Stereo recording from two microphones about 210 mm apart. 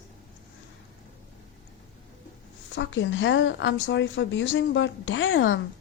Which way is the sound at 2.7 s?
60° left (ahead or behind).